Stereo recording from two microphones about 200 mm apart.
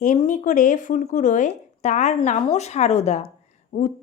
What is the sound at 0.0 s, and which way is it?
Speech, 40° left (ahead or behind).